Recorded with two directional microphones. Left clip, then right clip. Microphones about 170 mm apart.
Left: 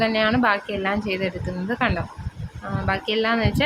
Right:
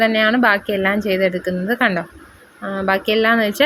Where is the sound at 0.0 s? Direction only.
30° right (ahead or behind).